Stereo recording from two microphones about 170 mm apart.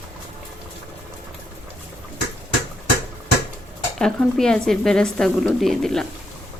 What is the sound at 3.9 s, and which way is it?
Speech, 5° left (ahead or behind).